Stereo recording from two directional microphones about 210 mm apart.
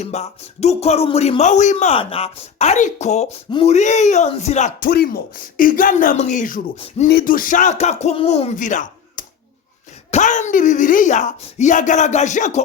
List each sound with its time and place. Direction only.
0.0 s speech: 30° left (ahead or behind)
4.9 s speech: 45° left (ahead or behind)